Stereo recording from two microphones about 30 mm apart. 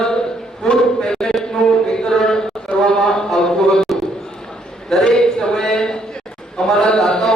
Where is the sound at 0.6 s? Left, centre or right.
Left.